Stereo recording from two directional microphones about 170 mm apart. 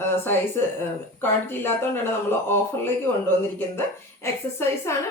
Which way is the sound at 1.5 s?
15° left (ahead or behind).